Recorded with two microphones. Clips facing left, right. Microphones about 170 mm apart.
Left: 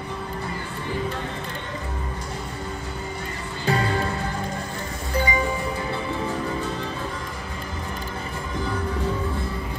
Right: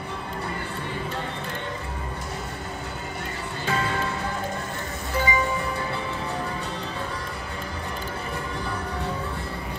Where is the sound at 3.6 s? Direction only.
35° left (ahead or behind).